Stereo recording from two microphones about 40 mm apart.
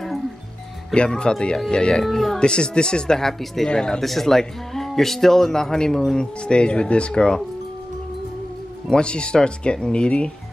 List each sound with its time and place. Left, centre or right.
0.9 s speech: left
2.0 s speech: centre
2.3 s speech: left; by 3.6 s centre
3.6 s speech: centre
4.0 s speech: centre; by 7.4 s left
8.8 s speech: left